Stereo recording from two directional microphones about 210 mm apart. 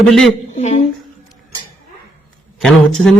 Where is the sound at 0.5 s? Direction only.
35° left (ahead or behind).